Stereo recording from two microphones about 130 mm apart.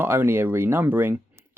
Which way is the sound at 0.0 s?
20° right (ahead or behind).